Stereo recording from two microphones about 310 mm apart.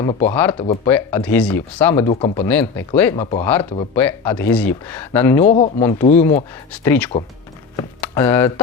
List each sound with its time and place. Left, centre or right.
0.0 s speech: centre
0.9 s speech: centre
2.5 s speech: centre
3.2 s speech: centre
3.4 s speech: centre
5.4 s speech: centre
5.8 s speech: centre